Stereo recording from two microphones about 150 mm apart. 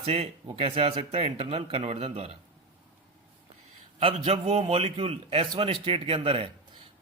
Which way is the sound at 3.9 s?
40° right (ahead or behind).